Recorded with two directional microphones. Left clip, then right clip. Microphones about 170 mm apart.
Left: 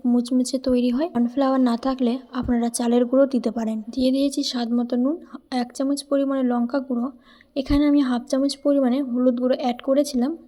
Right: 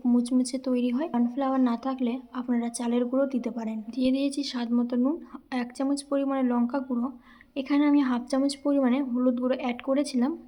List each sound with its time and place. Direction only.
0.2 s a woman's voice: 25° left (ahead or behind)